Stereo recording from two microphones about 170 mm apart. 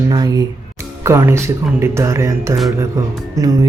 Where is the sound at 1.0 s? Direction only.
15° right (ahead or behind).